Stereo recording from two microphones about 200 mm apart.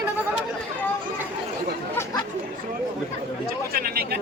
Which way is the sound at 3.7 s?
50° right (ahead or behind).